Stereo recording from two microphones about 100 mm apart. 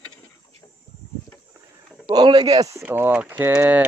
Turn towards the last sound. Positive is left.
turn(degrees=-15)  # may be behind; listen again after turning